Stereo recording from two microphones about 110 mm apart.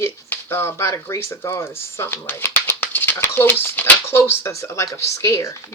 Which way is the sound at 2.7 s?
20° left (ahead or behind).